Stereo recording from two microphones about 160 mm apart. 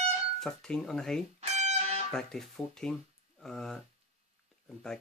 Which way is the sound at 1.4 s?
45° right (ahead or behind).